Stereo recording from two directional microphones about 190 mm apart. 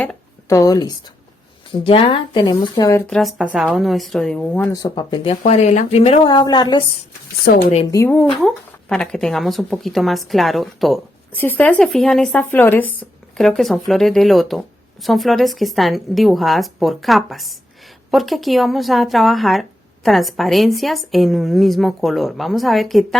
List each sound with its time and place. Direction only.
0.4 s a woman's voice: 15° left (ahead or behind)
3.1 s speech: centre (ahead or behind); by 5.4 s 25° left (ahead or behind)
5.4 s a woman's voice: 40° left (ahead or behind); by 6.8 s 25° left (ahead or behind)
7.4 s speech: 35° left (ahead or behind)
7.9 s speech: 15° left (ahead or behind)